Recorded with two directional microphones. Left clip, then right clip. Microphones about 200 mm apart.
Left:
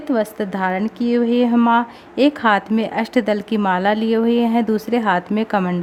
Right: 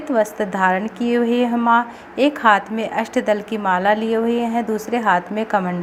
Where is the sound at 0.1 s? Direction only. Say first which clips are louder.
Right 2 dB; 40° left (ahead or behind).